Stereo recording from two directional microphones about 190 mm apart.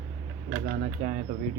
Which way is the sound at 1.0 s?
50° right (ahead or behind).